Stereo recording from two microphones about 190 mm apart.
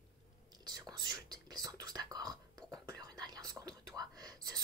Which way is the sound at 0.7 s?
20° right (ahead or behind).